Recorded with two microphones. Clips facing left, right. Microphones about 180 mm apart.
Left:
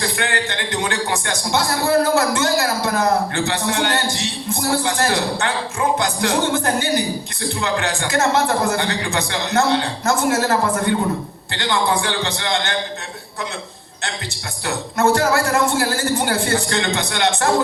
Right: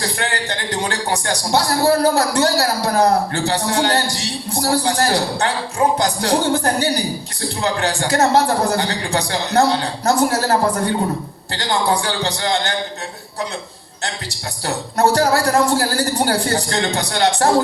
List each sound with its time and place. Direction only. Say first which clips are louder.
0.0 s speech: left 1 dB; 35° right (ahead or behind)
14.9 s speech: right 1 dB; 35° right (ahead or behind)